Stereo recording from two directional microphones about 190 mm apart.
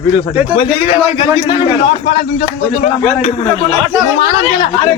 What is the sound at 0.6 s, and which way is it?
A man's voice, 30° left (ahead or behind).